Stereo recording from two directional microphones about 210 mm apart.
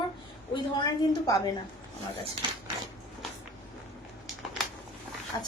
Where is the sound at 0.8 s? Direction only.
15° left (ahead or behind).